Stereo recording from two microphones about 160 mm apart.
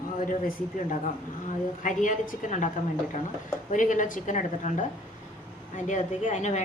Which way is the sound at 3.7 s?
55° left (ahead or behind).